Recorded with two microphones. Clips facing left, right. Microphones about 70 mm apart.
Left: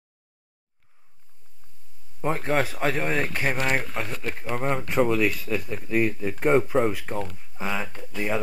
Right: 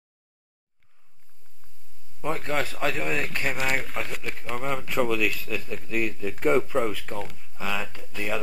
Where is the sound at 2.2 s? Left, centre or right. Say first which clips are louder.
Left 3 dB; left.